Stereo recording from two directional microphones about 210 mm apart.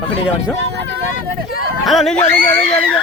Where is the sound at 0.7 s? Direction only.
55° right (ahead or behind).